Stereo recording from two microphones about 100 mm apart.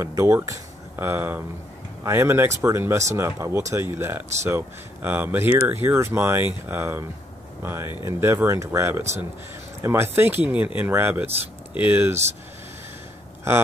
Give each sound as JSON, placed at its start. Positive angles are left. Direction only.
{"t": 0.0, "sound": "speech", "side_deg": -30}
{"t": 13.5, "sound": "speech", "side_deg": -25}